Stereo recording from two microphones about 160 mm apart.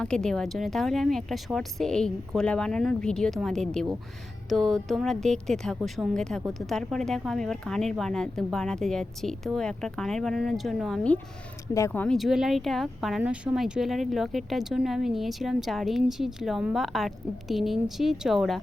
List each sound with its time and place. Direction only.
0.0 s a woman's voice: 5° left (ahead or behind)
11.7 s a woman's voice: 15° left (ahead or behind); by 18.6 s centre (ahead or behind)